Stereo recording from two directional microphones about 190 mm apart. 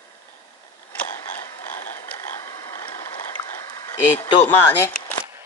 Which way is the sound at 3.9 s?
10° left (ahead or behind).